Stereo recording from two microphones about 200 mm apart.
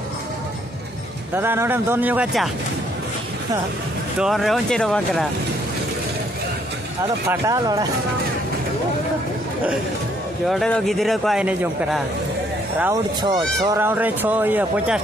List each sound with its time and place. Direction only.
1.3 s speech: 10° right (ahead or behind)
4.2 s speech: centre (ahead or behind)
7.2 s speech: 15° right (ahead or behind)
10.5 s speech: centre (ahead or behind)
13.2 s speech: 20° right (ahead or behind)